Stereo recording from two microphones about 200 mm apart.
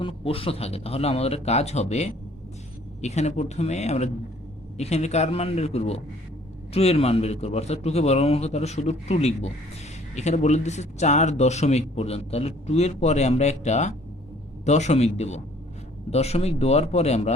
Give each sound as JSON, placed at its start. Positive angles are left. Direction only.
{"t": 0.0, "sound": "speech", "side_deg": 30}